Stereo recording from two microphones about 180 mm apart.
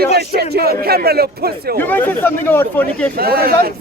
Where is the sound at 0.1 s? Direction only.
60° right (ahead or behind).